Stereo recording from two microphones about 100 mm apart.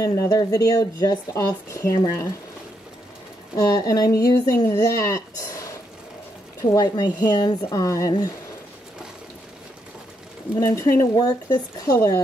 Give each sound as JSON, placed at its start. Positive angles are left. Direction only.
{"t": 0.0, "sound": "speech", "side_deg": 35}
{"t": 3.5, "sound": "speech", "side_deg": 35}
{"t": 6.7, "sound": "speech", "side_deg": 40}
{"t": 10.5, "sound": "speech", "side_deg": 30}